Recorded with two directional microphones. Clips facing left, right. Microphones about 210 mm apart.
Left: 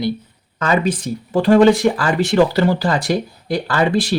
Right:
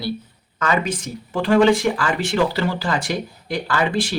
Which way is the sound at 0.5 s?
30° left (ahead or behind).